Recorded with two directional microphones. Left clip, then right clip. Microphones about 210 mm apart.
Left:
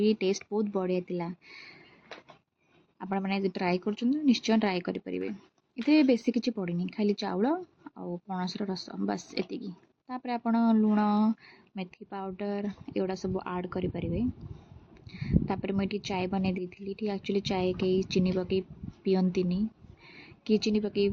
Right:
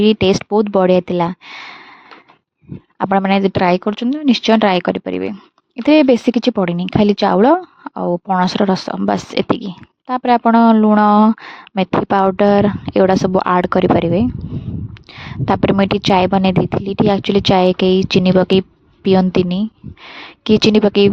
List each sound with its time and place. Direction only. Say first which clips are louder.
0.0 s speech: right 14 dB; 50° right (ahead or behind)
3.0 s speech: right 18 dB; 50° right (ahead or behind)
20.1 s speech: right 14 dB; 45° right (ahead or behind)